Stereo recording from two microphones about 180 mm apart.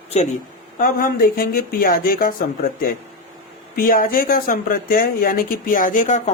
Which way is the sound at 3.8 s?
50° left (ahead or behind).